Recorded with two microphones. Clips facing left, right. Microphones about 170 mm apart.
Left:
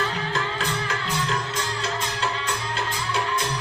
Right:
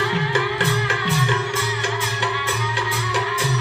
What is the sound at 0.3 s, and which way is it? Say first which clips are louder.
Music: right 6 dB; 90° right.